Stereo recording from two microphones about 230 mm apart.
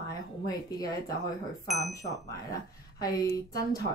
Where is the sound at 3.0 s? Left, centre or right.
Centre.